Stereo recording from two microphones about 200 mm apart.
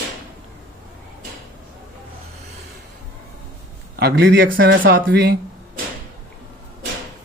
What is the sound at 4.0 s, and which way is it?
Speech, 50° right (ahead or behind).